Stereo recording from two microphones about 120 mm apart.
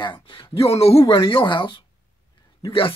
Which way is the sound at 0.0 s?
45° left (ahead or behind).